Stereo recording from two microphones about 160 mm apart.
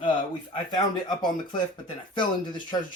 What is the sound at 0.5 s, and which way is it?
Speech, 25° left (ahead or behind).